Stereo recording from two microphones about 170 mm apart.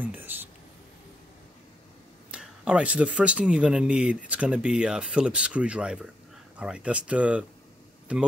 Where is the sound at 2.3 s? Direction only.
5° right (ahead or behind).